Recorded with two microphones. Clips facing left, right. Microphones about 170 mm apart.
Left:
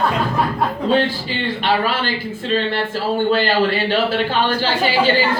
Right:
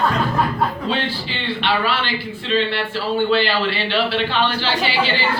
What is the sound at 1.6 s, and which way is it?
A man's voice, 45° left (ahead or behind).